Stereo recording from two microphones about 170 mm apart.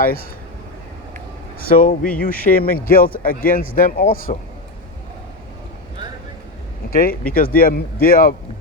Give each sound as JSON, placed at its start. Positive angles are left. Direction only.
{"t": 1.5, "sound": "speech", "side_deg": 55}
{"t": 6.9, "sound": "speech", "side_deg": 55}